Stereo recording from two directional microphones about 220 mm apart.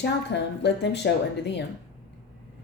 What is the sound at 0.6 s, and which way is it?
Speech, 50° left (ahead or behind).